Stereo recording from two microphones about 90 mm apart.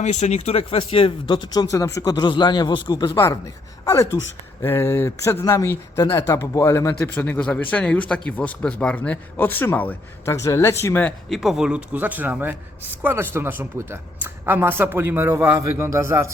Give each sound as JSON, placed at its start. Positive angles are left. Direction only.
{"t": 0.5, "sound": "speech", "side_deg": 90}
{"t": 1.7, "sound": "speech", "side_deg": 40}
{"t": 3.8, "sound": "speech", "side_deg": 30}
{"t": 7.2, "sound": "speech", "side_deg": 15}
{"t": 10.2, "sound": "speech", "side_deg": 35}
{"t": 11.3, "sound": "a man's voice", "side_deg": -5}